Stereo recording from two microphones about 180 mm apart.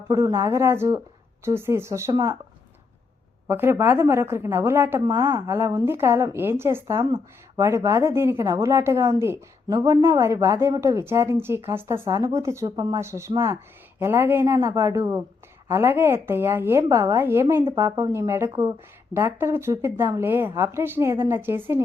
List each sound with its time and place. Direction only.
0.1 s a woman's voice: 15° right (ahead or behind)
3.4 s a woman's voice: 10° right (ahead or behind)